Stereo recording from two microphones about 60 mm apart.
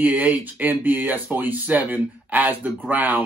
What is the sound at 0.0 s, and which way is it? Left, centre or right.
Speech, right.